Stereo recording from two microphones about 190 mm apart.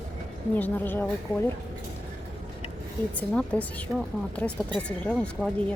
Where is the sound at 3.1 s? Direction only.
5° left (ahead or behind).